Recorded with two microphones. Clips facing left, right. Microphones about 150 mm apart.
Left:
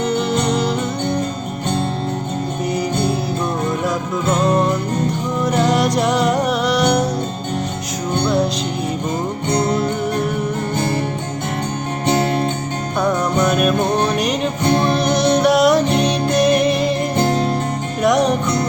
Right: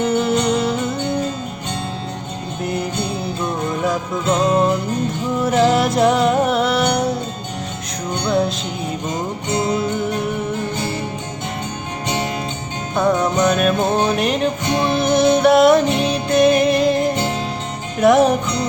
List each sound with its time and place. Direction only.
0.0 s music: 5° right (ahead or behind)
3.8 s music: centre (ahead or behind)
12.0 s music: 45° left (ahead or behind)
13.4 s music: centre (ahead or behind)